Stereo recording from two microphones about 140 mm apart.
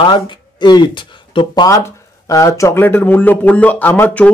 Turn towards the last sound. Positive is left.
turn(degrees=10)  # may be behind; listen again after turning